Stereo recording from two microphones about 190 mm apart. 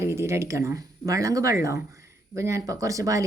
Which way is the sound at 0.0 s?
15° right (ahead or behind).